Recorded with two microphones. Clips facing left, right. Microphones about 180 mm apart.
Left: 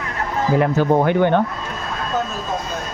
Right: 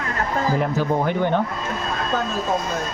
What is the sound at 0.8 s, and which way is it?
Speech, 60° left (ahead or behind).